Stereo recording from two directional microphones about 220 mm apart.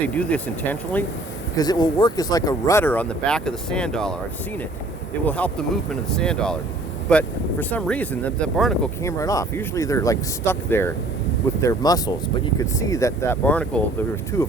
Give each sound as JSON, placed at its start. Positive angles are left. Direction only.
{"t": 0.1, "sound": "speech", "side_deg": 5}
{"t": 1.5, "sound": "speech", "side_deg": 20}
{"t": 5.2, "sound": "speech", "side_deg": 5}
{"t": 9.0, "sound": "speech", "side_deg": 15}